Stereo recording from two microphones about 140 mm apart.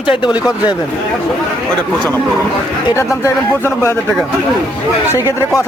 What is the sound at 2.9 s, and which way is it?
Speech, 20° left (ahead or behind).